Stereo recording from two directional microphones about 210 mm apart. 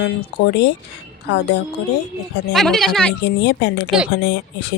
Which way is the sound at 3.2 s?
55° left (ahead or behind).